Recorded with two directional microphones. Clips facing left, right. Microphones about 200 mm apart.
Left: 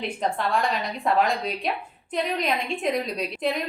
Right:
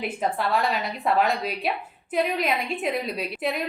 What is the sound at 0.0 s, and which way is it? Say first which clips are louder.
A woman's voice: even; 5° right (ahead or behind).